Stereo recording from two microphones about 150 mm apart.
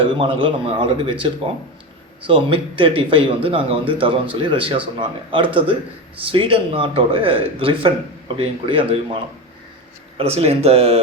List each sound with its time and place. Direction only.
0.0 s a man's voice: 35° right (ahead or behind)
10.2 s speech: 40° right (ahead or behind)